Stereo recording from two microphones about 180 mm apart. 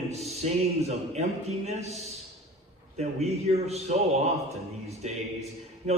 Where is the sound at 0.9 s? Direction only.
35° right (ahead or behind).